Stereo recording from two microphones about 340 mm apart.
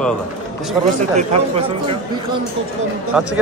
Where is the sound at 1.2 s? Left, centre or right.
Centre.